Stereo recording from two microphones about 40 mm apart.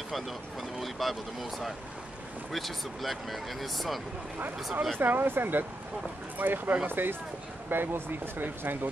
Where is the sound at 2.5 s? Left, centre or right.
Centre.